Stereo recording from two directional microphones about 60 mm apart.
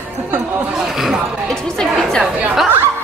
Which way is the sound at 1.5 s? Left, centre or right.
Centre.